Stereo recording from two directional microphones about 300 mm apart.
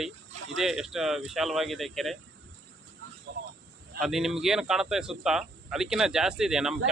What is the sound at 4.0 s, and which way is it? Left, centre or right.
Speech, centre.